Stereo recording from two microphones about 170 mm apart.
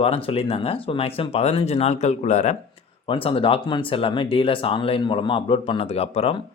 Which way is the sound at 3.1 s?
30° left (ahead or behind).